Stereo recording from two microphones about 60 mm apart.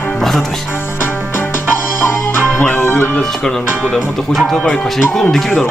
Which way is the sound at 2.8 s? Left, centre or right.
Left.